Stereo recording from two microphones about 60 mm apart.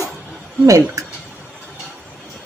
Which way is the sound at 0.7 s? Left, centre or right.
Right.